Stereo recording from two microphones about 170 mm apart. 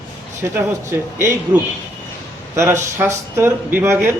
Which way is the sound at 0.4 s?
15° right (ahead or behind).